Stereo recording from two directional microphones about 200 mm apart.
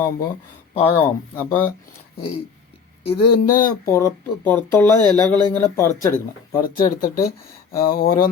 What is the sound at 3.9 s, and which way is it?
Speech, 10° left (ahead or behind).